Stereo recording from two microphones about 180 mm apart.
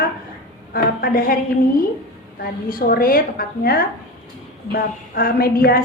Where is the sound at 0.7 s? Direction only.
55° left (ahead or behind).